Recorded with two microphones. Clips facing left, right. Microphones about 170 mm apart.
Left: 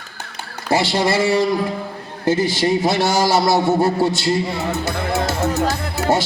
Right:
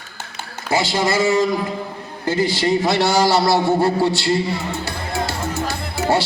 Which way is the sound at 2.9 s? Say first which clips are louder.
Even; 45° left (ahead or behind).